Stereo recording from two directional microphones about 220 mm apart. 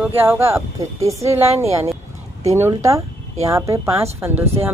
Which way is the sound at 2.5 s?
15° right (ahead or behind).